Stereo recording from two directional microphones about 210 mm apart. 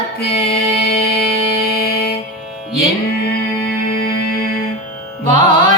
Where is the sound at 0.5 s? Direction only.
45° left (ahead or behind).